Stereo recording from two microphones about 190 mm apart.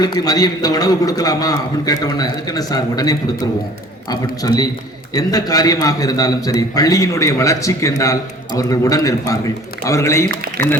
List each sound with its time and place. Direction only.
0.0 s a man's voice: 20° left (ahead or behind)